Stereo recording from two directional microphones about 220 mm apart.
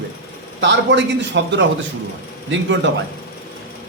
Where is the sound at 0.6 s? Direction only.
55° right (ahead or behind).